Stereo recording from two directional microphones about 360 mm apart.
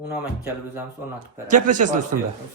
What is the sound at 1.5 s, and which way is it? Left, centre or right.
Speech, right.